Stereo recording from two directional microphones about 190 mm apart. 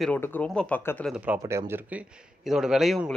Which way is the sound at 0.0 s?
10° left (ahead or behind).